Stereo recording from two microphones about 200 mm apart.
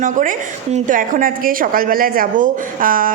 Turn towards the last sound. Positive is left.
turn(degrees=-45)  # may be behind; listen again after turning